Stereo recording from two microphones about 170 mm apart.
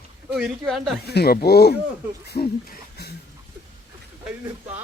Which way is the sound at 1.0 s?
70° left (ahead or behind).